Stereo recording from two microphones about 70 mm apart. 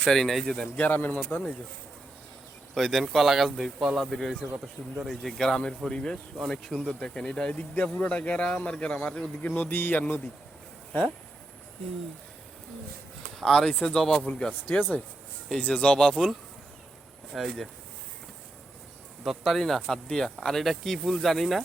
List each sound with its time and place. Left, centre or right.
0.0 s speech: centre
0.8 s a man's voice: left
2.7 s speech: centre
6.3 s speech: centre
9.5 s a man's voice: left
13.4 s speech: centre
14.8 s a man's voice: left
15.4 s speech: centre
17.3 s speech: centre
19.2 s speech: centre